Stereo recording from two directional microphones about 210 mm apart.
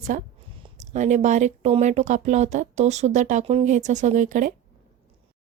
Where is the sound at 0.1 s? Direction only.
40° right (ahead or behind).